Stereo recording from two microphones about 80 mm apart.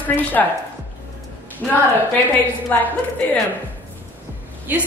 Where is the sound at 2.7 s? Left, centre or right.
Left.